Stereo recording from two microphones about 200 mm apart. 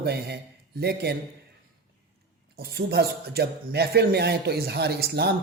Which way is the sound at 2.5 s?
50° right (ahead or behind).